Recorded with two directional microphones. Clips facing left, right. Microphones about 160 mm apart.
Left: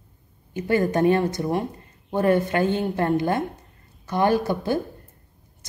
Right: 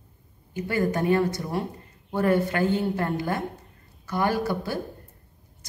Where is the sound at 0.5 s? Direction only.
25° left (ahead or behind).